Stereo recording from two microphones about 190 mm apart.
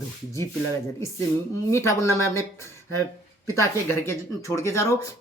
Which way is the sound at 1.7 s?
15° left (ahead or behind).